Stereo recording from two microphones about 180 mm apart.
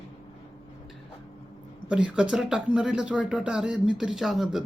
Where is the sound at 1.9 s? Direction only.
5° right (ahead or behind).